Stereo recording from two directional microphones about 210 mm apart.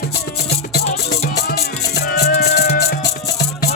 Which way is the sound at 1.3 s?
50° left (ahead or behind).